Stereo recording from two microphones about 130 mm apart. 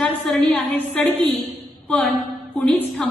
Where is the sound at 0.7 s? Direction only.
15° left (ahead or behind).